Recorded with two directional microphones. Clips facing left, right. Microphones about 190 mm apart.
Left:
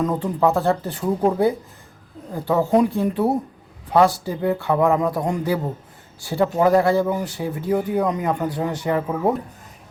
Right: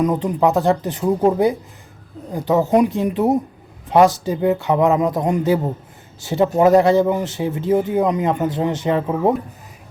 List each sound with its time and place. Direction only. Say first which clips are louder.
0.0 s speech: right 3 dB; 15° right (ahead or behind)